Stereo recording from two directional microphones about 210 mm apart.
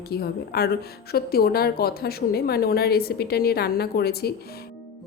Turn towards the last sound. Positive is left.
turn(degrees=50)  # may be behind; listen again after turning